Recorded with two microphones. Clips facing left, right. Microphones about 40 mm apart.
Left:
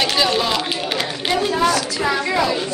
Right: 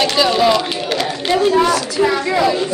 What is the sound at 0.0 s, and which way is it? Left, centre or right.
Run, centre.